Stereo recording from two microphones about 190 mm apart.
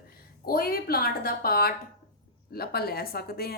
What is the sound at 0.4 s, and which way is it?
A woman's voice, 50° left (ahead or behind).